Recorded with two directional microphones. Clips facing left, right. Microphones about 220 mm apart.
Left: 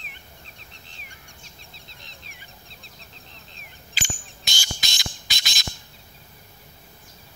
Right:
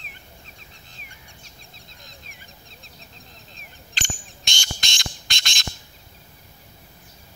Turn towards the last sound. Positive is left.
turn(degrees=5)  # may be behind; listen again after turning